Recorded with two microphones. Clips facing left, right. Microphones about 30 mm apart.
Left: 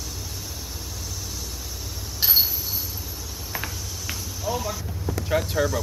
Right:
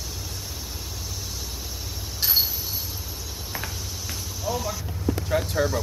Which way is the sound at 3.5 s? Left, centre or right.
Centre.